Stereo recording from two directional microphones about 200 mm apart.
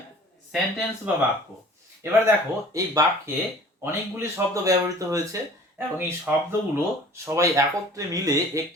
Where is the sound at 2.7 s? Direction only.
15° right (ahead or behind).